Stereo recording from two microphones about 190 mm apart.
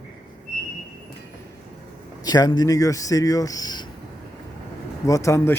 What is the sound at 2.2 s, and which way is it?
Speech, 20° left (ahead or behind).